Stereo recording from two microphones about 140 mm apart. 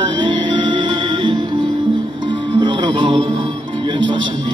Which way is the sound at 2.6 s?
35° right (ahead or behind).